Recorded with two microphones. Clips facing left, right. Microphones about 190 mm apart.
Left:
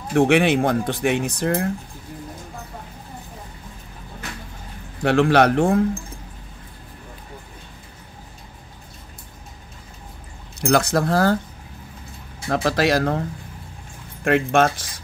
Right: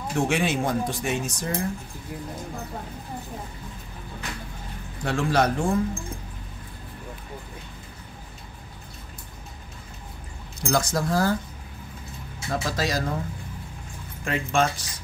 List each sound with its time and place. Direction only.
0.1 s speech: 60° left (ahead or behind)
5.0 s speech: 65° left (ahead or behind)
10.6 s speech: 65° left (ahead or behind)
12.4 s speech: 65° left (ahead or behind)
14.2 s speech: 60° left (ahead or behind)